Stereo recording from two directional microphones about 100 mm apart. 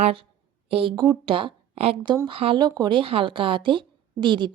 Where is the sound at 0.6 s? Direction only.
75° right (ahead or behind).